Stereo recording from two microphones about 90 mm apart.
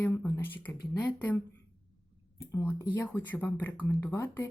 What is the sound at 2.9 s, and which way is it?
A woman's voice, 20° left (ahead or behind).